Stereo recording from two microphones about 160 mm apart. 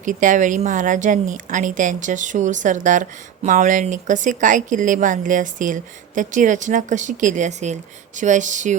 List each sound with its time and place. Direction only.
0.0 s speech: 55° right (ahead or behind)